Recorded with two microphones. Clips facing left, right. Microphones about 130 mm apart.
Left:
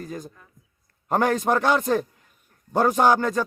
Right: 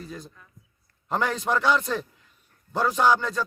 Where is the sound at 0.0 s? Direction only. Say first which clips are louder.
Left 5 dB; 45° left (ahead or behind).